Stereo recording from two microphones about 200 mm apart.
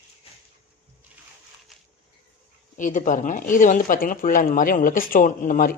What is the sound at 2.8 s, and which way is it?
Speech, 40° left (ahead or behind).